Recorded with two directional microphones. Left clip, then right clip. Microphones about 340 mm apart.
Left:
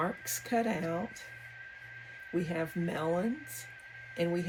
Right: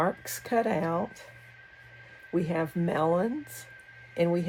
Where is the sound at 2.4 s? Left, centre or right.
Right.